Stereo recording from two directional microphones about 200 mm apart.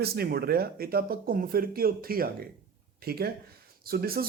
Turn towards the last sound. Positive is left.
turn(degrees=-50)  # may be behind; listen again after turning